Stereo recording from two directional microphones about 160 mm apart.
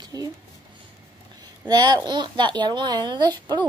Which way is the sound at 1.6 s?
25° right (ahead or behind).